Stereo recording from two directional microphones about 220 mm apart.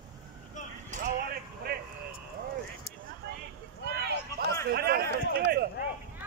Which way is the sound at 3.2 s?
45° right (ahead or behind).